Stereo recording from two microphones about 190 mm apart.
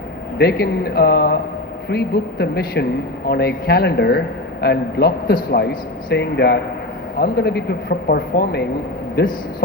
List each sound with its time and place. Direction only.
0.3 s a man's voice: 55° left (ahead or behind)